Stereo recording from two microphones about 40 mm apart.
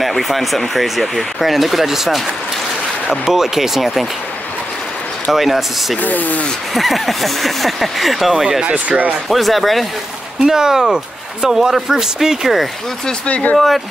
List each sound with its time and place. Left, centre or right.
0.0 s speech: centre
5.3 s speech: centre
6.0 s speech: left
6.7 s speech: centre
8.4 s speech: centre
8.6 s speech: right
9.3 s speech: centre
10.4 s speech: centre
13.3 s speech: left
13.6 s speech: centre